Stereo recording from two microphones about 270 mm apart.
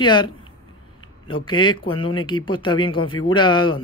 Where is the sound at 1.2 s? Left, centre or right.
Centre.